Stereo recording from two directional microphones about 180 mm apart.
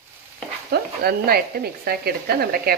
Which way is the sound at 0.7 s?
60° right (ahead or behind).